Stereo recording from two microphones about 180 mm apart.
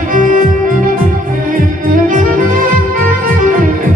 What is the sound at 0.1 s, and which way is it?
Music, 45° right (ahead or behind).